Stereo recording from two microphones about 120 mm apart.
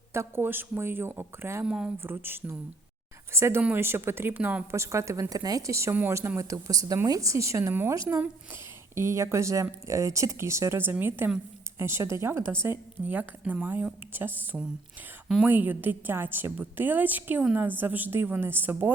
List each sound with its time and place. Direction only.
0.1 s a woman's voice: 20° right (ahead or behind)
1.6 s speech: 5° right (ahead or behind)
2.0 s a woman's voice: 20° right (ahead or behind)